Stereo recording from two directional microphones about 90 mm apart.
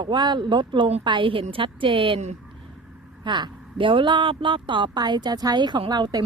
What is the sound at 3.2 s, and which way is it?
Speech, 60° right (ahead or behind).